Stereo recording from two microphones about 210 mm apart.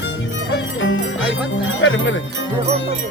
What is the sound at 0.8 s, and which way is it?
Speech, 65° left (ahead or behind).